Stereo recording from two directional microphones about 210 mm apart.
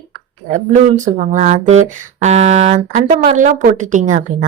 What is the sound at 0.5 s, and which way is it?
Speech, 35° right (ahead or behind).